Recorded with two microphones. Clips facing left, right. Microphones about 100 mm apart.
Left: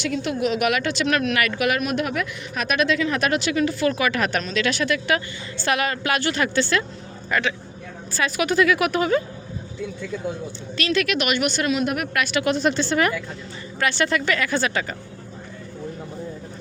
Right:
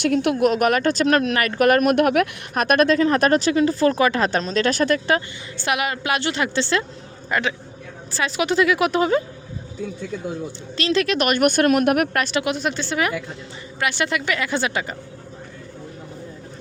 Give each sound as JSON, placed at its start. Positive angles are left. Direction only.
{"t": 0.0, "sound": "speech", "side_deg": -55}
{"t": 5.6, "sound": "a woman's voice", "side_deg": -15}
{"t": 10.8, "sound": "speech", "side_deg": -30}
{"t": 12.1, "sound": "speech", "side_deg": -35}
{"t": 12.5, "sound": "speech", "side_deg": -5}
{"t": 13.7, "sound": "a woman's voice", "side_deg": -15}